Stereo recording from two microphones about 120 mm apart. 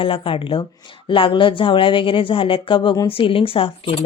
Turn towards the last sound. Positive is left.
turn(degrees=50)  # may be behind; listen again after turning